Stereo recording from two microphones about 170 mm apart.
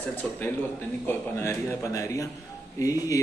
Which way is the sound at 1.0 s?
15° left (ahead or behind).